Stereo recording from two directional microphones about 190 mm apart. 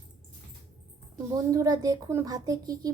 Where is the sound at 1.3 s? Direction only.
20° right (ahead or behind).